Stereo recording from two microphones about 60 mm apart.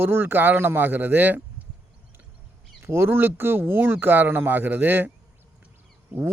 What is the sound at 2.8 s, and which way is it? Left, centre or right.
Speech, right.